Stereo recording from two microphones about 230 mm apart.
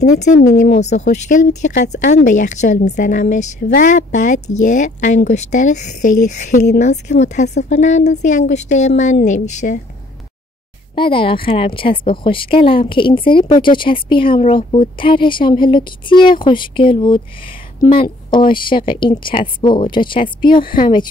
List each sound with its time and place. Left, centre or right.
0.0 s speech: left
11.0 s a woman's voice: left